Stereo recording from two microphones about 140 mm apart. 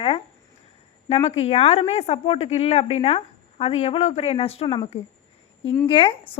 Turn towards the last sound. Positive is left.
turn(degrees=40)  # may be behind; listen again after turning